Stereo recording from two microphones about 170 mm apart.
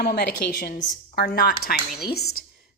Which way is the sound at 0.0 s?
65° left (ahead or behind).